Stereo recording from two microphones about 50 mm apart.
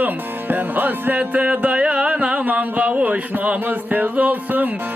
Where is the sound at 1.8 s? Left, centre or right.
Right.